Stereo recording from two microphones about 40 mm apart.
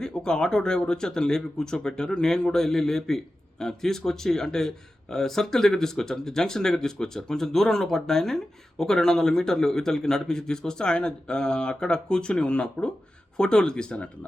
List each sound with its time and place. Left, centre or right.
0.0 s a man's voice: centre
13.3 s a man's voice: centre